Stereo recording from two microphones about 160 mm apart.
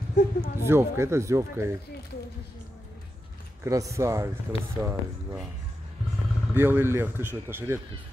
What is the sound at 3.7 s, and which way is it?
Speech, 20° right (ahead or behind).